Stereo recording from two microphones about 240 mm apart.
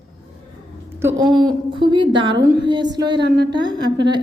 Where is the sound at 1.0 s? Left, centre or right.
Centre.